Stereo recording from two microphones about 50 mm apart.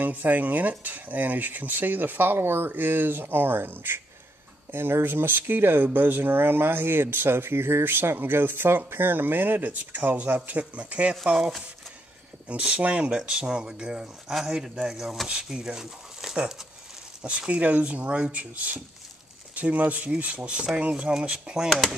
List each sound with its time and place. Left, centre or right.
0.0 s speech: right
12.4 s speech: right; by 15.2 s centre
15.2 s speech: right
15.6 s speech: centre
17.2 s speech: right
21.1 s speech: centre
21.6 s speech: centre